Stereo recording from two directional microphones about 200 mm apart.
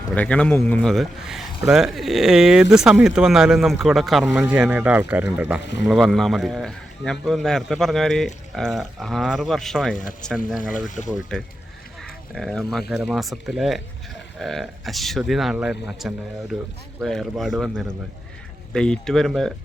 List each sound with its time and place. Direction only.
0.1 s a man's voice: 5° left (ahead or behind)
10.6 s speech: 40° left (ahead or behind)
11.3 s a man's voice: 5° left (ahead or behind)